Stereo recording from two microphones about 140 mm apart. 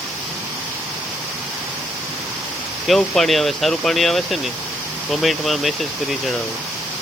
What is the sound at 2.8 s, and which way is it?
Speech, centre (ahead or behind).